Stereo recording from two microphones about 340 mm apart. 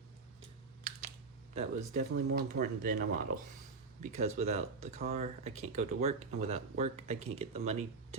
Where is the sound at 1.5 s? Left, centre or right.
Right.